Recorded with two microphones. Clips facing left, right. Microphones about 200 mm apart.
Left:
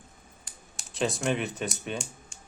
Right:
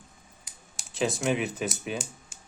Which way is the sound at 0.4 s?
Centre (ahead or behind).